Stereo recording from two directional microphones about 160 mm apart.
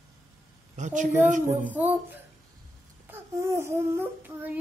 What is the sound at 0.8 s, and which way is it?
Speech, 45° right (ahead or behind).